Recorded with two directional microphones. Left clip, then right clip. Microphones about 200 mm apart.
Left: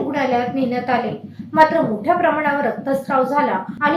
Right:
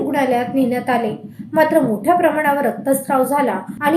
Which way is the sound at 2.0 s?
50° right (ahead or behind).